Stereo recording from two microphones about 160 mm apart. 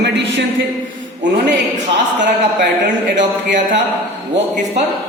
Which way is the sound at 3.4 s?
90° right.